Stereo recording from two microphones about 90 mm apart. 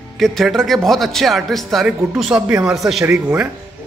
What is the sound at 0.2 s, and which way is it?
Speech, centre (ahead or behind).